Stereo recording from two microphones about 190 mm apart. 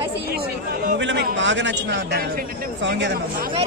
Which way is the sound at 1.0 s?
70° right (ahead or behind).